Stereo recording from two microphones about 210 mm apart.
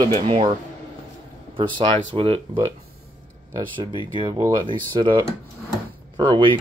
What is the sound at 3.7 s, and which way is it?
Speech, 25° right (ahead or behind).